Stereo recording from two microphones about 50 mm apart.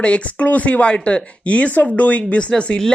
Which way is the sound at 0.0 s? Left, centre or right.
Left.